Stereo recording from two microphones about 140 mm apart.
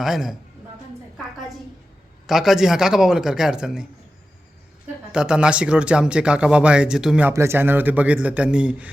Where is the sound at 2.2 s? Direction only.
Centre (ahead or behind).